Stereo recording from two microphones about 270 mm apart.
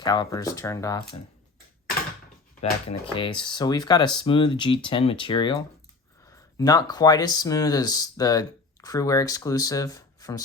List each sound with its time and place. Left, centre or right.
0.0 s speech: centre
2.6 s speech: left